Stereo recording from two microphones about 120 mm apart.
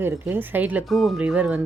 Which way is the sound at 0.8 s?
Centre (ahead or behind).